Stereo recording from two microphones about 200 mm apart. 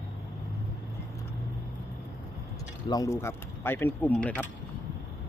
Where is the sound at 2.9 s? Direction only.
15° left (ahead or behind).